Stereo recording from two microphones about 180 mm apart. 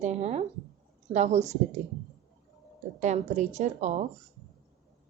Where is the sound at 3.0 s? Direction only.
40° right (ahead or behind).